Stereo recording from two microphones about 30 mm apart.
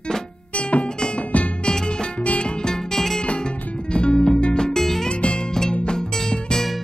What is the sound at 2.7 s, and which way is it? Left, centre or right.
Music, centre.